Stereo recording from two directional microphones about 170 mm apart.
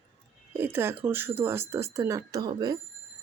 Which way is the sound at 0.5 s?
15° right (ahead or behind).